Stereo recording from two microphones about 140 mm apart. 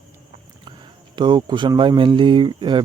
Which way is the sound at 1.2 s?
30° right (ahead or behind).